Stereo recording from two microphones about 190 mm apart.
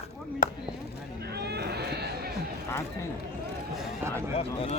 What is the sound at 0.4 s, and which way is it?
Chop, 45° left (ahead or behind).